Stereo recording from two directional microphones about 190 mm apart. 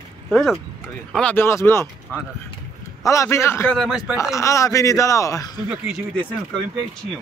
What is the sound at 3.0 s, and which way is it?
Speech, 15° left (ahead or behind).